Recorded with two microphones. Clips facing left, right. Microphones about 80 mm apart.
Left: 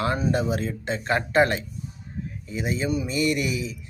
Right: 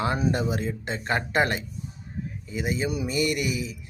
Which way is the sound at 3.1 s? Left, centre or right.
Right.